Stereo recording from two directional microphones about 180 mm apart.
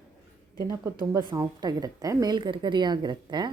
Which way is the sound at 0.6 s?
15° right (ahead or behind).